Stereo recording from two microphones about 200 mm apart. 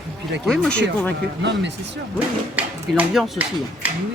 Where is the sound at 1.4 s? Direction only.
60° right (ahead or behind).